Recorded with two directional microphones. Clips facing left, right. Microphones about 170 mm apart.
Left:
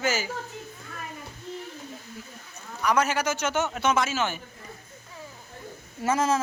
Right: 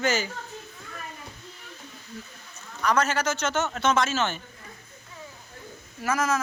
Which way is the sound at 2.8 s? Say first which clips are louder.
Even; 10° left (ahead or behind).